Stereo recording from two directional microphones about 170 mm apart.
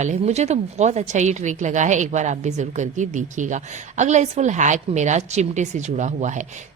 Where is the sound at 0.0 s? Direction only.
40° right (ahead or behind).